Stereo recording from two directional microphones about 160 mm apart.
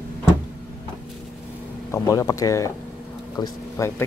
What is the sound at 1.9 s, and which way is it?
Speech, 20° left (ahead or behind).